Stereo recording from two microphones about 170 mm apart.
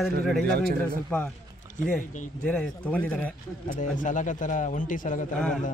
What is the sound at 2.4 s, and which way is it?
Speech, 5° left (ahead or behind).